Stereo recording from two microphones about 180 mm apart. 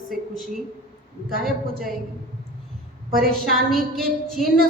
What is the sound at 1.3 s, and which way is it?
Speech, 55° right (ahead or behind).